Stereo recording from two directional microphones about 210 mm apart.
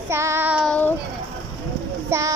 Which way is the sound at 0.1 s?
10° right (ahead or behind).